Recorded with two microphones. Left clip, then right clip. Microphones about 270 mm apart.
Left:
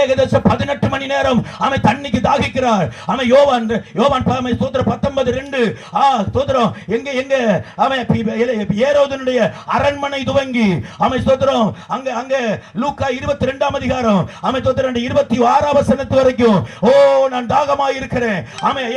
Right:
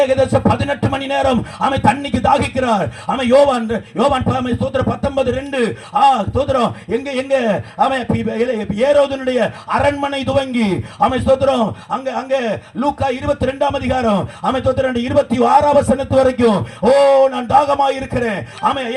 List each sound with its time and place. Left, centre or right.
0.0 s a man's voice: left